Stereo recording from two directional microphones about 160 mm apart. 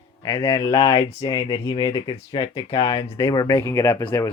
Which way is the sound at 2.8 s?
35° left (ahead or behind).